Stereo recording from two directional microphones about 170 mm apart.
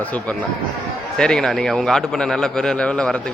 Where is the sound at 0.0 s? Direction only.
10° left (ahead or behind).